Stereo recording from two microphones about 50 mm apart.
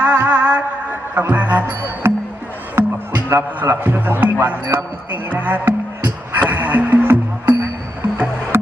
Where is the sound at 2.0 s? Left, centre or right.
Right.